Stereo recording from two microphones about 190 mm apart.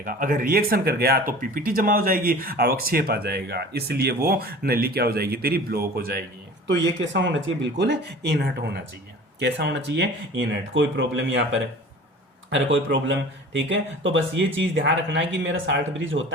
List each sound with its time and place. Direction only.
0.0 s speech: 45° right (ahead or behind)
6.7 s speech: 70° right (ahead or behind)
12.5 s speech: 85° right